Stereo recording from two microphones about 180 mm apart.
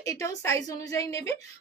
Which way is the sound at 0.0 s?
20° left (ahead or behind).